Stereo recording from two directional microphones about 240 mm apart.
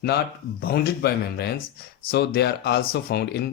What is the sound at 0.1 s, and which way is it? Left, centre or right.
Speech, left.